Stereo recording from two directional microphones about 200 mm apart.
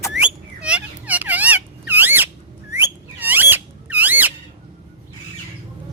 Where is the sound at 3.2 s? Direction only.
10° right (ahead or behind).